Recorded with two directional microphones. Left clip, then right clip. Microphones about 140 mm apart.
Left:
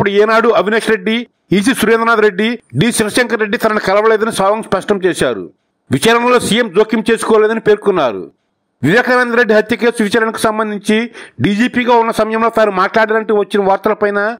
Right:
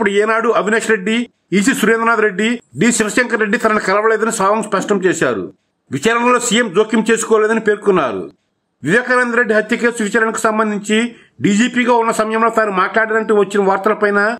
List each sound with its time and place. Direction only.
0.0 s a man's voice: 50° left (ahead or behind)